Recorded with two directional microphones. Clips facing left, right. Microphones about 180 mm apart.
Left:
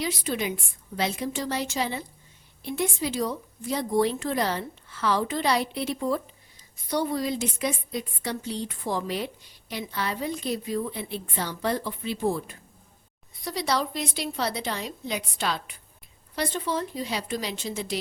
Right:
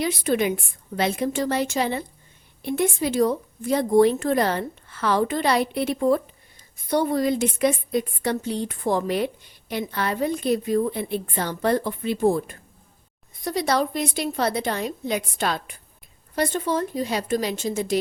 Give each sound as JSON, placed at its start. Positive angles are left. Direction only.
{"t": 0.0, "sound": "a woman's voice", "side_deg": -55}